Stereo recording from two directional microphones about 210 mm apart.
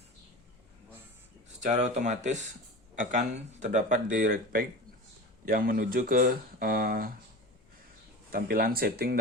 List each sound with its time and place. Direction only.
1.6 s speech: 35° right (ahead or behind)
8.3 s speech: 45° right (ahead or behind)